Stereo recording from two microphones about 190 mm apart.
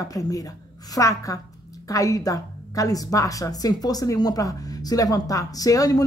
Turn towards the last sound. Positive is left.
turn(degrees=20)  # may be behind; listen again after turning